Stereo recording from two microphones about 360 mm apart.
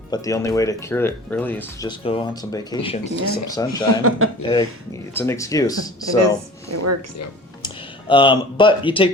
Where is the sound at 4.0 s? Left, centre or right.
Right.